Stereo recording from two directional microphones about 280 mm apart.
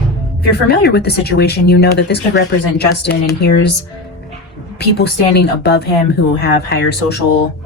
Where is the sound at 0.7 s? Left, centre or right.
Left.